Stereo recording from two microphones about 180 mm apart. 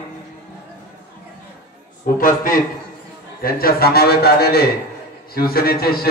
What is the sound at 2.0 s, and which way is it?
A man's voice, 50° left (ahead or behind).